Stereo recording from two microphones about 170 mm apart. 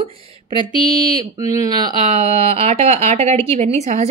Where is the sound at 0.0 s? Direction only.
30° right (ahead or behind).